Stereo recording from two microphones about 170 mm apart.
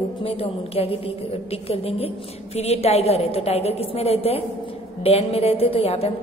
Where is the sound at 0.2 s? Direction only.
35° left (ahead or behind).